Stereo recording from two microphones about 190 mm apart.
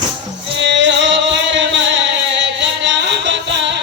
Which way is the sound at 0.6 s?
70° right (ahead or behind).